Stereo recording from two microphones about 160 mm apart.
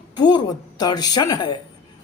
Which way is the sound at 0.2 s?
25° left (ahead or behind).